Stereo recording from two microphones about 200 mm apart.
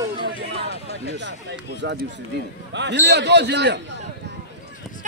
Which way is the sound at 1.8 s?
60° right (ahead or behind).